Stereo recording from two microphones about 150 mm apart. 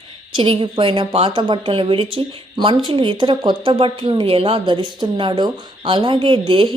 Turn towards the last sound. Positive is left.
turn(degrees=-35)  # may be behind; listen again after turning